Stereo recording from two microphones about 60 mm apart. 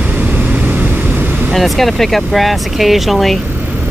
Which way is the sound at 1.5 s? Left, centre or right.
Centre.